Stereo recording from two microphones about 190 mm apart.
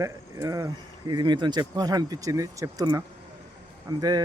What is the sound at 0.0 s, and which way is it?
Speech, 15° right (ahead or behind).